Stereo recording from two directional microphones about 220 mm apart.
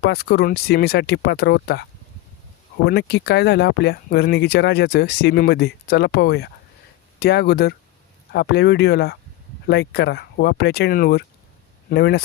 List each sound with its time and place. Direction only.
0.0 s speech: 45° left (ahead or behind)
2.8 s speech: 50° left (ahead or behind)